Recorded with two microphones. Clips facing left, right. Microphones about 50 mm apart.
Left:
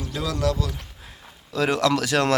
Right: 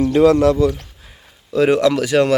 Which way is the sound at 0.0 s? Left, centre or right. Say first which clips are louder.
Right 14 dB; right.